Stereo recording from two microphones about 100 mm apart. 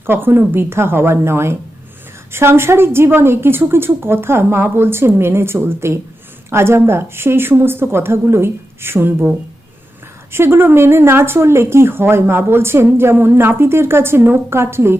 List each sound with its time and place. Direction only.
0.0 s speech: 20° right (ahead or behind)
10.3 s speech: 25° right (ahead or behind)